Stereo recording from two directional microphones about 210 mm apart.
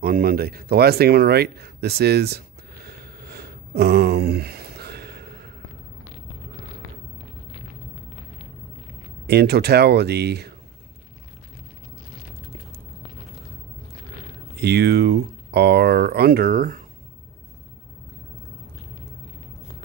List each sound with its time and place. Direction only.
0.0 s a sound: 45° right (ahead or behind)
9.3 s speech: 50° right (ahead or behind)
14.6 s speech: 50° right (ahead or behind)